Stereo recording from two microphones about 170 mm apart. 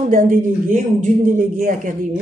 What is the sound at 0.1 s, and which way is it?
Speech, 50° right (ahead or behind).